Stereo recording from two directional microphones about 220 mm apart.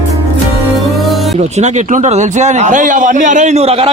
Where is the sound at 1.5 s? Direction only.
30° right (ahead or behind).